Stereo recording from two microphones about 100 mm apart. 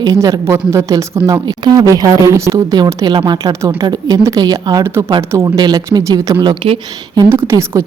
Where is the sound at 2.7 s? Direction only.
45° right (ahead or behind).